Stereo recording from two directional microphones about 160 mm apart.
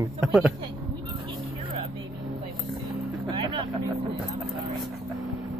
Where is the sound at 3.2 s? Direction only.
30° right (ahead or behind).